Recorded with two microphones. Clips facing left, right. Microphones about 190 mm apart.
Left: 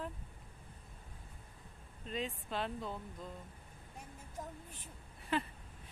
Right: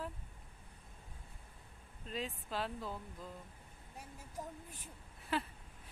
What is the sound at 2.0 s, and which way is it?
Speech, centre (ahead or behind).